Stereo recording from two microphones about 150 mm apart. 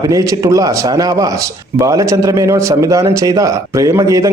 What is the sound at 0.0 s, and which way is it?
A man's voice, 20° right (ahead or behind).